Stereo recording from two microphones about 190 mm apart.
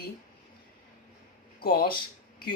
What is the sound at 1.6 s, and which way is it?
Speech, 55° left (ahead or behind).